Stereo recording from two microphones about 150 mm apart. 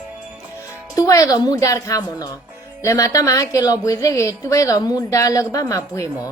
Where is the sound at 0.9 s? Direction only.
20° left (ahead or behind).